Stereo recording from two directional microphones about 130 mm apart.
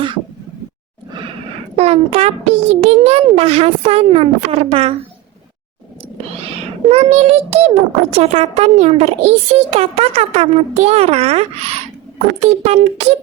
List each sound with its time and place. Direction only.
1.7 s a child's voice: 50° right (ahead or behind)
6.8 s a child's voice: 55° right (ahead or behind)